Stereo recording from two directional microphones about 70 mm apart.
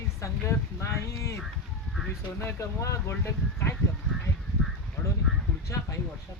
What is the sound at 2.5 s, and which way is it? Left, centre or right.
Speech, left.